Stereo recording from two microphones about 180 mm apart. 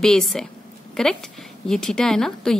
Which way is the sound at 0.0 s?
Centre (ahead or behind).